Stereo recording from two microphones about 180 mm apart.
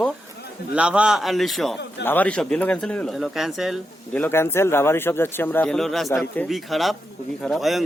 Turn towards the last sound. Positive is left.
turn(degrees=0)  # may be behind; listen again after turning